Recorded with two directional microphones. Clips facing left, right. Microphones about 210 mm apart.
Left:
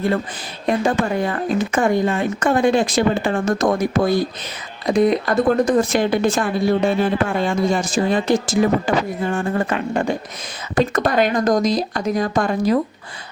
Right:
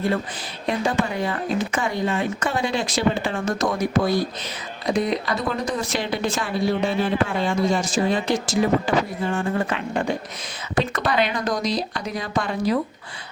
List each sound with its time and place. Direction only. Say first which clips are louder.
0.7 s a woman's voice: left 4 dB; 50° left (ahead or behind)